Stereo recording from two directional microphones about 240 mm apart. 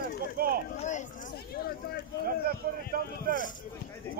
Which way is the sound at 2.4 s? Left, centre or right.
Right.